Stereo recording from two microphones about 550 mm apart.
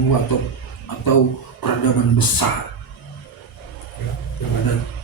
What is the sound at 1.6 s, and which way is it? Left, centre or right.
Speech, left.